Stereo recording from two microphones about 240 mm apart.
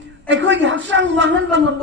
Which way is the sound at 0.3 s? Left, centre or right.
Right.